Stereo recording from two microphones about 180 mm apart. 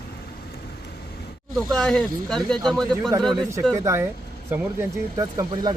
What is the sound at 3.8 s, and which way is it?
Speech, 15° right (ahead or behind).